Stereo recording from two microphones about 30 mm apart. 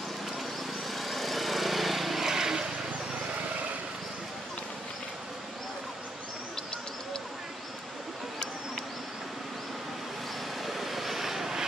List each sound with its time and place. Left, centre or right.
0.9 s lawn mower: centre
2.2 s vehicle: centre
10.6 s vehicle: centre